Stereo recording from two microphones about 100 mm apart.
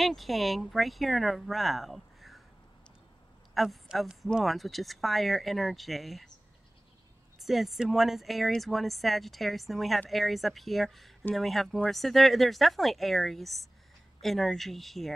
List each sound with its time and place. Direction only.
0.0 s speech: centre (ahead or behind)
3.5 s speech: centre (ahead or behind)
7.3 s speech: centre (ahead or behind)